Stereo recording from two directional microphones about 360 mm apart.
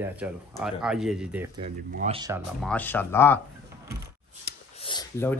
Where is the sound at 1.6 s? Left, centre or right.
Centre.